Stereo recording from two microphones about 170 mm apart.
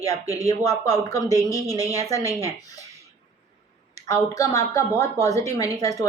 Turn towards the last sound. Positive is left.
turn(degrees=20)  # may be behind; listen again after turning